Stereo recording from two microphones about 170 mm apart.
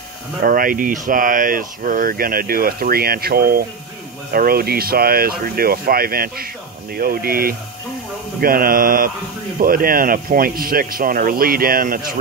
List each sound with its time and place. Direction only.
0.4 s speech: 55° right (ahead or behind)